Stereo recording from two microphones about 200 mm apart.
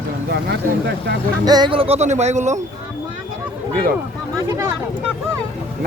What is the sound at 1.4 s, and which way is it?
Speech, 20° right (ahead or behind).